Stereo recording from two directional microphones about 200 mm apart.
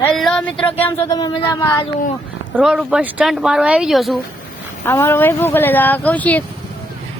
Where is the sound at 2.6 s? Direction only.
5° right (ahead or behind).